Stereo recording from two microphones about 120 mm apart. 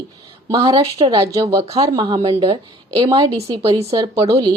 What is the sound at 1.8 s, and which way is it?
Speech, 35° right (ahead or behind).